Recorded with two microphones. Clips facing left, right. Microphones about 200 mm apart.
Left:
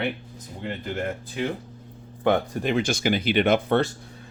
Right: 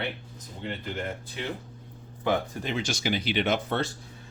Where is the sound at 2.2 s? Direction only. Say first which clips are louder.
Left 5 dB; 60° left (ahead or behind).